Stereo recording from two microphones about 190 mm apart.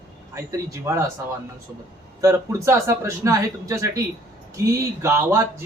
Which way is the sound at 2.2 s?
15° right (ahead or behind).